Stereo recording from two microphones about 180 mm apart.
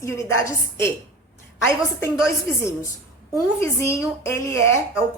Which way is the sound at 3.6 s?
15° left (ahead or behind).